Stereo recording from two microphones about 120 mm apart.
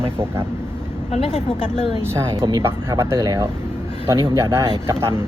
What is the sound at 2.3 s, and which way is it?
Speech, 40° right (ahead or behind).